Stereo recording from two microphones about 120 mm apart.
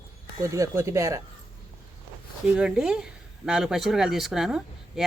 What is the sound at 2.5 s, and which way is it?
Speech, 5° right (ahead or behind).